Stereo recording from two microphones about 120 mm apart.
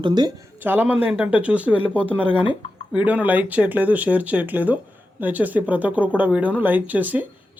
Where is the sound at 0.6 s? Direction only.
15° right (ahead or behind).